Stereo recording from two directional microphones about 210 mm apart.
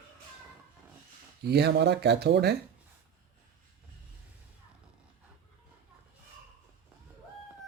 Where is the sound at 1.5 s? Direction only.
50° right (ahead or behind).